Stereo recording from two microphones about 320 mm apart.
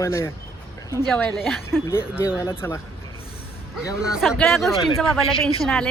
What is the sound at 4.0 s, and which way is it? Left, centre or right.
Speech, centre.